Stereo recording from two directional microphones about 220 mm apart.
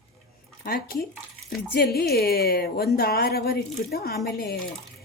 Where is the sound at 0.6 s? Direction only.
40° left (ahead or behind).